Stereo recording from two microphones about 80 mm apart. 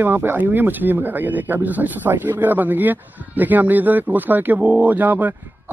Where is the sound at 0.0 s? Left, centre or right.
Right.